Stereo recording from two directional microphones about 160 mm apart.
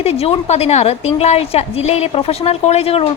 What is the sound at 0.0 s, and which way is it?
A woman's voice, 40° left (ahead or behind).